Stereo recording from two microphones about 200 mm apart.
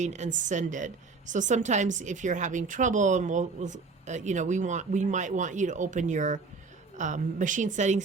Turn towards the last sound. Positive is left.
turn(degrees=-35)  # may be behind; listen again after turning